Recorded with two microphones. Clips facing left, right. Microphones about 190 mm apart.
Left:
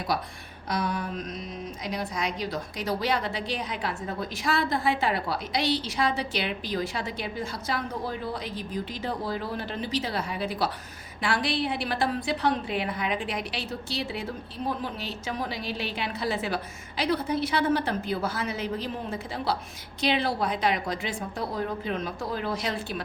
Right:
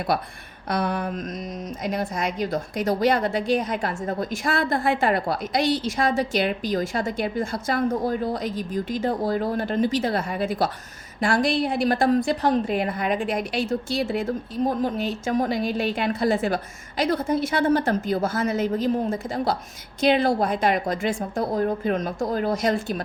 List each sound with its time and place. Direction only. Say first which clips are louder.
0.1 s a woman's voice: right 3 dB; 55° right (ahead or behind)
0.7 s a sound: right 4 dB; 55° right (ahead or behind)
1.8 s a woman's voice: right 5 dB; 50° right (ahead or behind)